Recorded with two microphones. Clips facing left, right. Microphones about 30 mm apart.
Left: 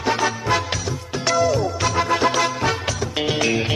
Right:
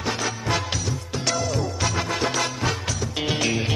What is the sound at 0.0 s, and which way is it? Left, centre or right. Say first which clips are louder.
Music: left 6 dB; centre.